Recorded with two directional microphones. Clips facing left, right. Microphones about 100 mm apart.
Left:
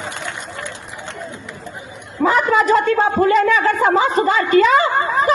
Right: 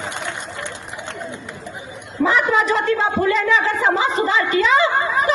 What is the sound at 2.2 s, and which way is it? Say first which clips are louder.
Speech: left 2 dB; 45° left (ahead or behind).